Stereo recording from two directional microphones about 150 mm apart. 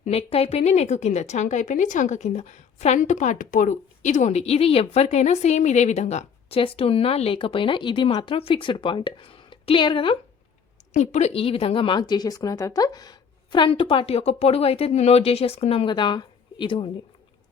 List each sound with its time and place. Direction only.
0.0 s a woman's voice: 45° left (ahead or behind)
10.9 s a woman's voice: 50° left (ahead or behind); by 16.9 s 35° left (ahead or behind)